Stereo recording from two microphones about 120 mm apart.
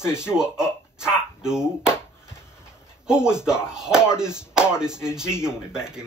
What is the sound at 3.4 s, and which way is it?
Speech, 5° right (ahead or behind).